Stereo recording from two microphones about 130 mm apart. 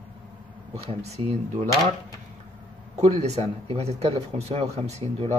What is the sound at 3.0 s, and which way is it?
Speech, 55° right (ahead or behind).